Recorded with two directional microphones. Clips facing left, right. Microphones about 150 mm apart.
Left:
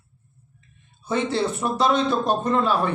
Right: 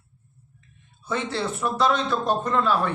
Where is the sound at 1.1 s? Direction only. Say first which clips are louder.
Left 4 dB; 20° left (ahead or behind).